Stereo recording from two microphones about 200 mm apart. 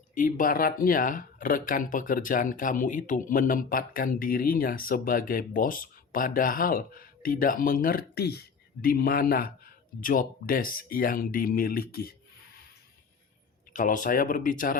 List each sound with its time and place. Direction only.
0.1 s speech: 40° left (ahead or behind)
13.7 s speech: 40° left (ahead or behind)